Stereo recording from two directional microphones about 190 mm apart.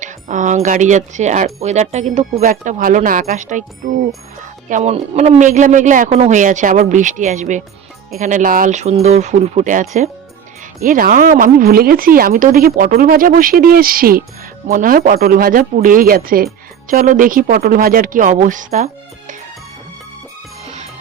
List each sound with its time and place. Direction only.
0.0 s speech: 40° right (ahead or behind)
4.7 s speech: 35° right (ahead or behind)